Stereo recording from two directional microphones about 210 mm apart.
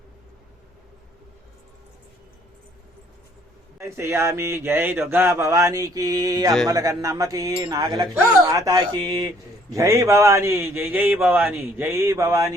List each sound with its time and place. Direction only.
3.8 s speech: 15° right (ahead or behind)